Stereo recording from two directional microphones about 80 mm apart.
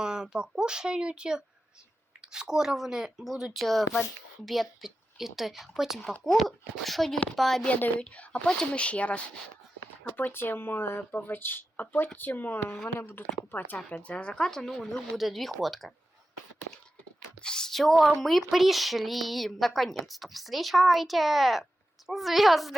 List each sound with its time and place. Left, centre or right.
0.0 s speech: centre
7.7 s a woman's voice: centre
13.7 s a woman's voice: centre
17.4 s speech: centre